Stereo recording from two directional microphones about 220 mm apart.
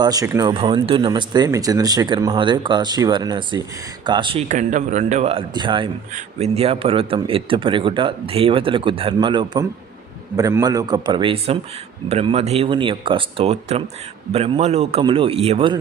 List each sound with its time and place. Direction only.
0.0 s a man's voice: 15° right (ahead or behind)